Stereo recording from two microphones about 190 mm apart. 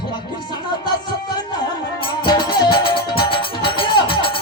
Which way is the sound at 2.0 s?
25° left (ahead or behind).